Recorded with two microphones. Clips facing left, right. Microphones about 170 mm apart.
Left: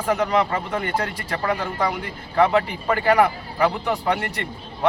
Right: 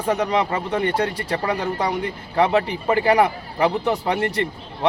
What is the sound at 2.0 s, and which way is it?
A man's voice, 20° right (ahead or behind).